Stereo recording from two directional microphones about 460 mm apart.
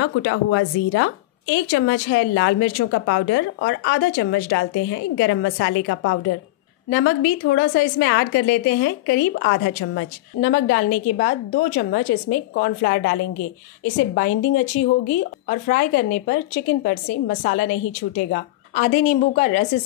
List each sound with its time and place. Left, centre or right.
0.0 s a woman's voice: left